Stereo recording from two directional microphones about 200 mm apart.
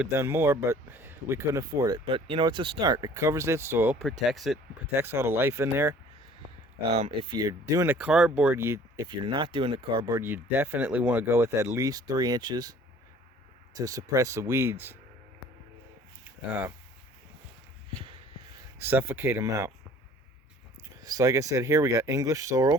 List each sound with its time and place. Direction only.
0.1 s speech: 15° right (ahead or behind)
4.3 s speech: centre (ahead or behind)
4.9 s speech: 10° right (ahead or behind)
6.9 s speech: 30° right (ahead or behind)
10.2 s speech: 10° right (ahead or behind)
13.7 s speech: 15° right (ahead or behind)
16.5 s speech: 10° right (ahead or behind)
18.8 s speech: 10° right (ahead or behind)
21.0 s speech: 15° right (ahead or behind)